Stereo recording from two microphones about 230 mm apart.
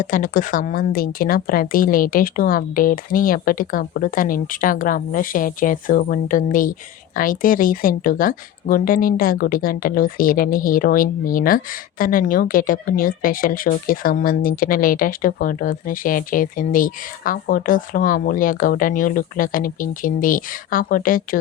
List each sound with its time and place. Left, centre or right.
0.0 s speech: left